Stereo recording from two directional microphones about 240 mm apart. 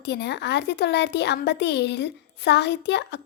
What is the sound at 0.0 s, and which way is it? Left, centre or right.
Speech, left.